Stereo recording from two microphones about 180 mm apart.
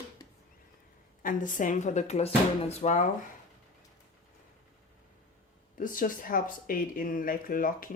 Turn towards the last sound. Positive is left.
turn(degrees=50)  # may be behind; listen again after turning